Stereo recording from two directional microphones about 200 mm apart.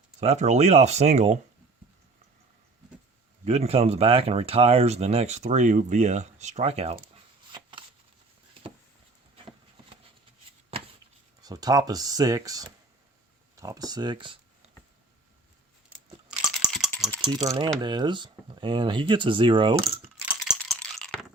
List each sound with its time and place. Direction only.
0.2 s speech: 35° right (ahead or behind)
3.4 s speech: 30° right (ahead or behind)
7.5 s a sound: 25° right (ahead or behind)
11.4 s speech: 20° right (ahead or behind)
16.3 s rattle: 5° right (ahead or behind)
17.3 s speech: 20° right (ahead or behind)
20.2 s rattle: 5° right (ahead or behind)
20.7 s a sound: 5° left (ahead or behind)